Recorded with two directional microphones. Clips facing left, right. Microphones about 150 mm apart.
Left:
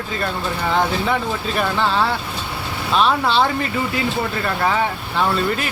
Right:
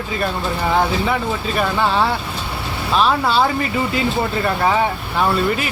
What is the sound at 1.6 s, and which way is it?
Speech, 15° right (ahead or behind).